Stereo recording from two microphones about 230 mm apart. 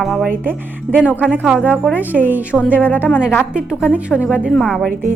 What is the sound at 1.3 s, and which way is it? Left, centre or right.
A woman's voice, centre.